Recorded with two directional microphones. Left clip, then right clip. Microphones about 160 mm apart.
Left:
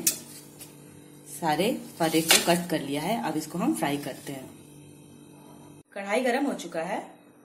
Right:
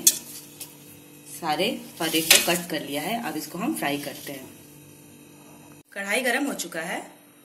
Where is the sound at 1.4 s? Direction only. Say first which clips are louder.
Even; 55° left (ahead or behind).